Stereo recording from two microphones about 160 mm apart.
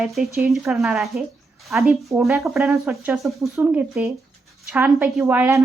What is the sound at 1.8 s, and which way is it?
Speech, 15° right (ahead or behind).